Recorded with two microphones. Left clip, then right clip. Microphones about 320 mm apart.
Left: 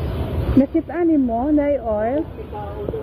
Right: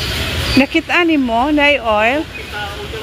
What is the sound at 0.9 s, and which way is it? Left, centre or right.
Speech, right.